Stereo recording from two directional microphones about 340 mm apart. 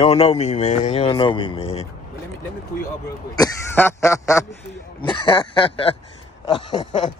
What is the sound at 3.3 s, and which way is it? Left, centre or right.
Speech, centre.